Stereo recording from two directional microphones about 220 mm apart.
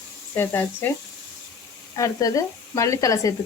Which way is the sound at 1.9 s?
15° left (ahead or behind).